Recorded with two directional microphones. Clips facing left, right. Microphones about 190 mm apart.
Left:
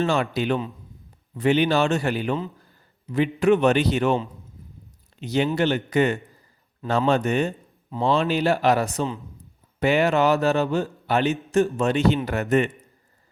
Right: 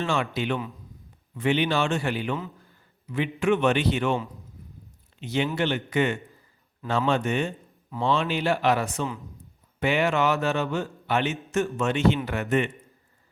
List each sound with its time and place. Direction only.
0.0 s a man's voice: 40° left (ahead or behind)